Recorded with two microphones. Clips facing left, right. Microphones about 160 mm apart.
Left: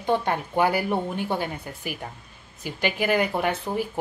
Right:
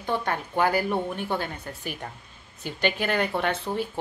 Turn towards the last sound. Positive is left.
turn(degrees=10)  # may be behind; listen again after turning